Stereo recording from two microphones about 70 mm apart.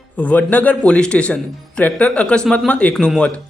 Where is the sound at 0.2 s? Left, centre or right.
Left.